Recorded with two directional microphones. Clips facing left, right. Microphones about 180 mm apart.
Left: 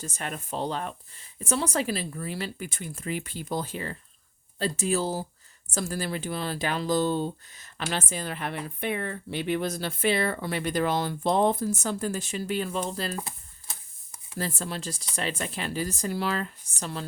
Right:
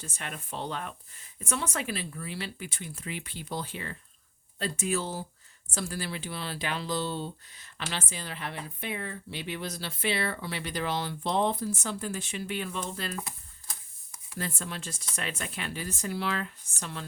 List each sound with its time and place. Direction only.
0.0 s speech: 40° left (ahead or behind)
13.0 s a sound: 35° left (ahead or behind)
14.3 s speech: 35° left (ahead or behind)